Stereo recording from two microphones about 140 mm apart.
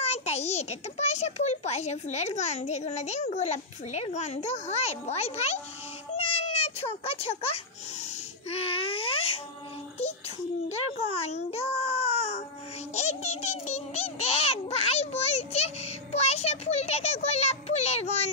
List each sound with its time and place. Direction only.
0.0 s a child's voice: 50° left (ahead or behind)
6.2 s baby cry: 45° left (ahead or behind)
8.5 s babbling: 45° left (ahead or behind)
10.7 s a child's voice: 50° left (ahead or behind)
12.9 s a sound: 50° left (ahead or behind)